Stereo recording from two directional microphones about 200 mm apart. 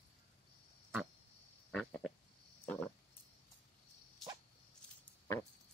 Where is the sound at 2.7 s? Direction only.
10° left (ahead or behind).